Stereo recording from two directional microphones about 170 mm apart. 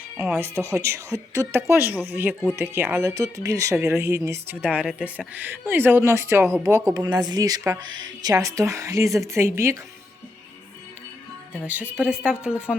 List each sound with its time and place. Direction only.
0.3 s a woman's voice: 15° right (ahead or behind)
11.5 s speech: 10° right (ahead or behind)